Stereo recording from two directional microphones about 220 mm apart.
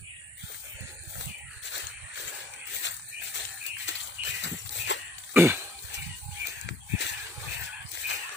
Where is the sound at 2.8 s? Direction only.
55° left (ahead or behind).